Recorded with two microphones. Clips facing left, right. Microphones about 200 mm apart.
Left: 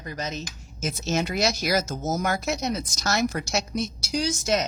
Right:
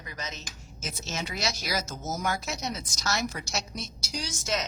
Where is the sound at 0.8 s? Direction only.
55° left (ahead or behind).